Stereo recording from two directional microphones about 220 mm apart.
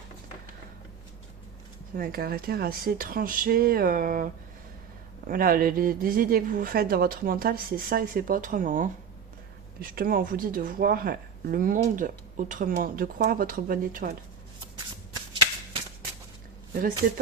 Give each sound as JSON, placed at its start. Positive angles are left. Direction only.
{"t": 2.0, "sound": "speech", "side_deg": -45}
{"t": 5.3, "sound": "speech", "side_deg": -40}
{"t": 9.9, "sound": "speech", "side_deg": -40}